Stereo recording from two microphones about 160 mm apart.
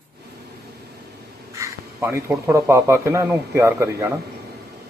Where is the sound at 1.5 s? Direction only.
20° right (ahead or behind).